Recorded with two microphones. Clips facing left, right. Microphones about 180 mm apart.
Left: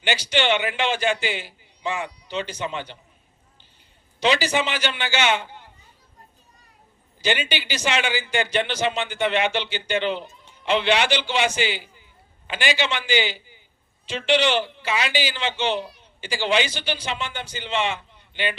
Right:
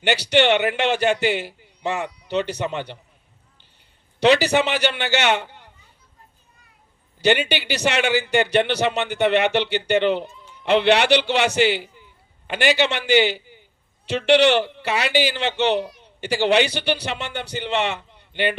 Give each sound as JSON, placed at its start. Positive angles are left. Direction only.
{"t": 0.0, "sound": "a man's voice", "side_deg": -65}
{"t": 4.2, "sound": "a man's voice", "side_deg": -65}
{"t": 7.2, "sound": "a man's voice", "side_deg": -65}